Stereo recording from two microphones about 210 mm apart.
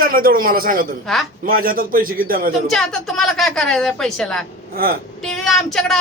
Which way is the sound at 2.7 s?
Centre (ahead or behind).